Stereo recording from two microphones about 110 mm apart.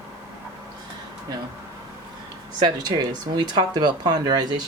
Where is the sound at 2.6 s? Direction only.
40° right (ahead or behind).